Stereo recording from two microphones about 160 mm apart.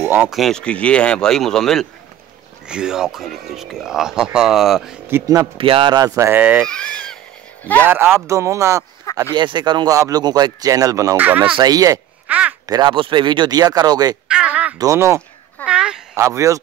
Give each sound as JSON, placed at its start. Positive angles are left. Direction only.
{"t": 0.0, "sound": "a sound", "side_deg": -15}
{"t": 0.3, "sound": "speech", "side_deg": 0}
{"t": 5.0, "sound": "speech", "side_deg": -20}
{"t": 5.6, "sound": "speech", "side_deg": -35}
{"t": 6.6, "sound": "speech", "side_deg": 5}
{"t": 7.8, "sound": "speech", "side_deg": -15}
{"t": 9.3, "sound": "speech", "side_deg": -30}
{"t": 11.5, "sound": "speech", "side_deg": -25}
{"t": 12.3, "sound": "speech", "side_deg": -10}
{"t": 12.6, "sound": "speech", "side_deg": -25}
{"t": 14.2, "sound": "speech", "side_deg": -5}
{"t": 14.8, "sound": "speech", "side_deg": -20}
{"t": 15.6, "sound": "speech", "side_deg": -5}
{"t": 16.2, "sound": "speech", "side_deg": -20}